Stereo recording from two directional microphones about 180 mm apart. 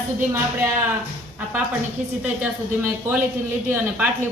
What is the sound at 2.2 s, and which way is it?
A woman's voice, 10° right (ahead or behind).